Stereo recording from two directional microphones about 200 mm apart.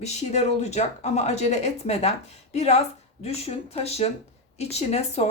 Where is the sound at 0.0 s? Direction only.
35° left (ahead or behind).